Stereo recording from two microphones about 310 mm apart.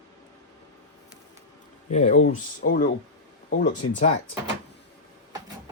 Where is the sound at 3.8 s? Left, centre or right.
Left.